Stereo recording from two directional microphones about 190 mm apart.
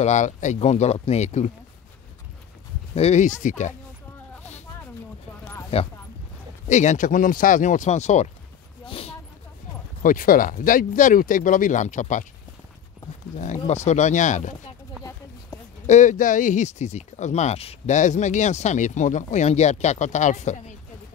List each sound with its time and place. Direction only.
0.0 s speech: 40° left (ahead or behind)
3.0 s speech: 35° left (ahead or behind)
5.7 s speech: 30° left (ahead or behind)
8.8 s a sound: 30° left (ahead or behind)
10.0 s speech: 45° left (ahead or behind)
13.4 s speech: 40° left (ahead or behind)
15.5 s a sound: 20° left (ahead or behind)
15.9 s speech: 40° left (ahead or behind)